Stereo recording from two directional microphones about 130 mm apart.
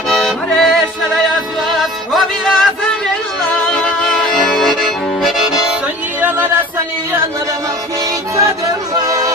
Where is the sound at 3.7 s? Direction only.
5° left (ahead or behind).